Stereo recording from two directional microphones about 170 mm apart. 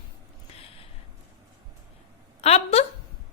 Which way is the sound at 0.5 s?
35° left (ahead or behind).